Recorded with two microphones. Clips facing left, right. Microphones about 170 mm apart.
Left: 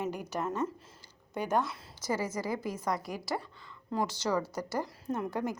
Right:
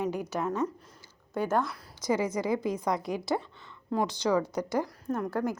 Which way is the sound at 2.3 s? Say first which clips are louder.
Right 5 dB; 20° right (ahead or behind).